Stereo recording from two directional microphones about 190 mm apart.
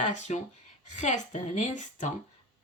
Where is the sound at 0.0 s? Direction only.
40° left (ahead or behind).